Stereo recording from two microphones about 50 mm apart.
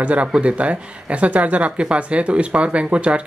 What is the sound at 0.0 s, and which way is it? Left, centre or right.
Speech, right.